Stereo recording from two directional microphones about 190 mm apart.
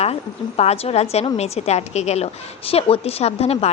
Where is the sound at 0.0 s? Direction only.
35° left (ahead or behind).